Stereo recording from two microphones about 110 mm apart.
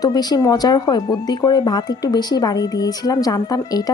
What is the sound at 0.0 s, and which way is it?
Speech, 35° left (ahead or behind).